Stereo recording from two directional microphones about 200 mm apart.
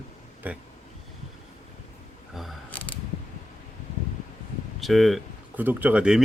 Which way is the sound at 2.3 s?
5° left (ahead or behind).